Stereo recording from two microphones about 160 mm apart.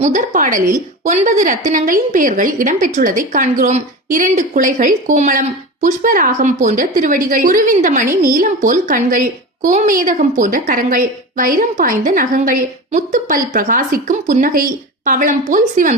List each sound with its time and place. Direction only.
0.0 s a woman's voice: 50° right (ahead or behind)